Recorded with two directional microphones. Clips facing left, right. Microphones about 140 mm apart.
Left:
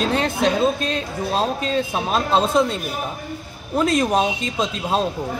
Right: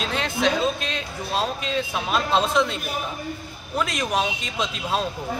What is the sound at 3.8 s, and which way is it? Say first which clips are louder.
Speech: left 6 dB; 35° left (ahead or behind).